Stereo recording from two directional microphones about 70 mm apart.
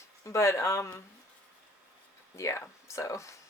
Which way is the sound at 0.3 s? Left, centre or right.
Left.